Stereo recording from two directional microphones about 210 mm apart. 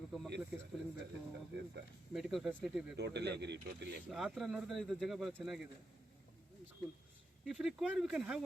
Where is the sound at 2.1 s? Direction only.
Centre (ahead or behind).